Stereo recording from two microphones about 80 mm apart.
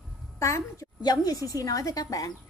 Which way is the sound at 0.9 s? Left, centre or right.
Left.